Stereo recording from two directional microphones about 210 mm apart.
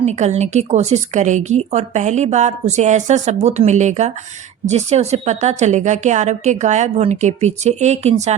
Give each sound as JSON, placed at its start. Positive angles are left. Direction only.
{"t": 0.0, "sound": "speech", "side_deg": -30}